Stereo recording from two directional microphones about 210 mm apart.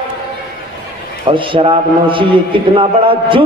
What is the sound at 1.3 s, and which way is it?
A man's voice, 25° right (ahead or behind).